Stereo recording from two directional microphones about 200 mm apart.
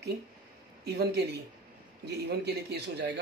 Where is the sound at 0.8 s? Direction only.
55° right (ahead or behind).